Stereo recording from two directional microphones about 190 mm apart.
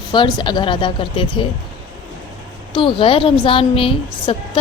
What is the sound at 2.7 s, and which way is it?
Speech, 25° left (ahead or behind).